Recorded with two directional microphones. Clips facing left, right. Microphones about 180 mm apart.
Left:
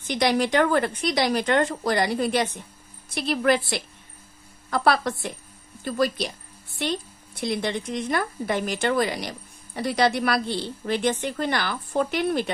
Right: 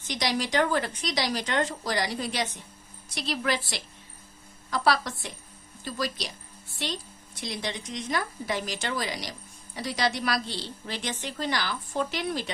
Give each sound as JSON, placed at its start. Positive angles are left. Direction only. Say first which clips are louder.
{"t": 0.1, "sound": "a woman's voice", "louder": "left 6 dB", "side_deg": 55}